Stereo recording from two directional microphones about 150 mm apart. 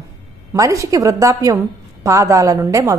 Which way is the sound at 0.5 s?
20° right (ahead or behind).